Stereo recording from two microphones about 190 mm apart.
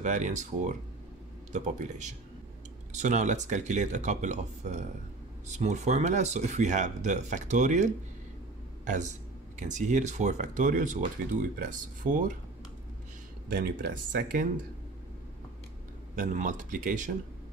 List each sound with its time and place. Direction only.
0.0 s speech: 40° right (ahead or behind)
13.5 s speech: 45° right (ahead or behind)
16.2 s speech: 45° right (ahead or behind)